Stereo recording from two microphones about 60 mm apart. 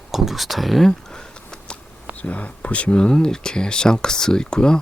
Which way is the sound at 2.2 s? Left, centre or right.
Left.